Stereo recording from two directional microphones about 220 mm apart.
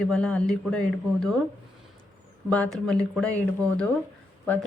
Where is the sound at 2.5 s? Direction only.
Centre (ahead or behind).